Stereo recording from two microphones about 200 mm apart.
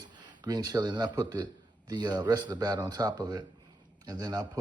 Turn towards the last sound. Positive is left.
turn(degrees=-20)  # may be behind; listen again after turning